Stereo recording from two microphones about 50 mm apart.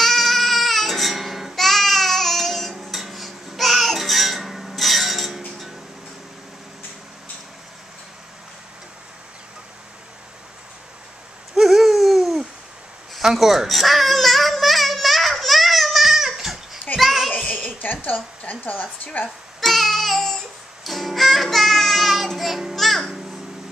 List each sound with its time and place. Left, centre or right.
0.0 s music: centre
11.5 s a sound: centre
13.1 s babbling: centre
16.9 s a sound: centre
17.5 s a sound: left
18.1 s a woman's voice: left
18.6 s a woman's voice: left
19.2 s babbling: centre
20.8 s music: centre